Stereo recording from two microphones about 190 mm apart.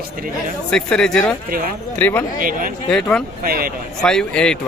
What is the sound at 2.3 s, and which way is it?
Speech, 45° right (ahead or behind).